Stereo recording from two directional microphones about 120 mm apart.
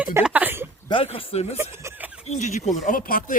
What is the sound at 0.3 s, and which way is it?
Speech, 15° right (ahead or behind).